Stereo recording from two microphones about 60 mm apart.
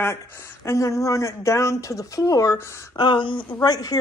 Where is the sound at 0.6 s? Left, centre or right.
Left.